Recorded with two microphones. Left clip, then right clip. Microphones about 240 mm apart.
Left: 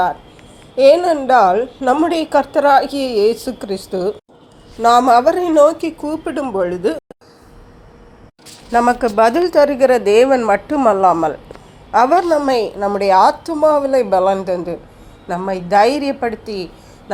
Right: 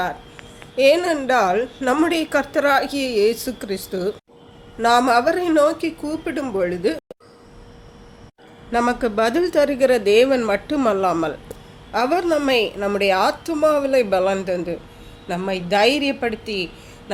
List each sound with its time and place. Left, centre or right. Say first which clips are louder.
0.8 s a woman's voice: left 5 dB; centre
8.7 s a woman's voice: left 6 dB; centre